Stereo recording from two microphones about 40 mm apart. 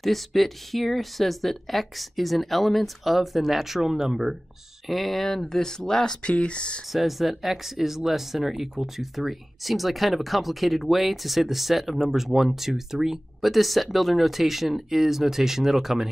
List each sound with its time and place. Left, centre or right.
0.0 s speech: centre
6.2 s speech: left
6.9 s speech: centre